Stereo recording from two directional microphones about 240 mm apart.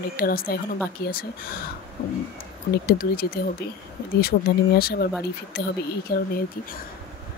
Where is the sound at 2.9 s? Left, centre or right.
Left.